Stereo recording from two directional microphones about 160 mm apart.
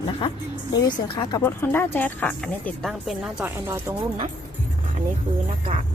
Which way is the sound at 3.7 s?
15° right (ahead or behind).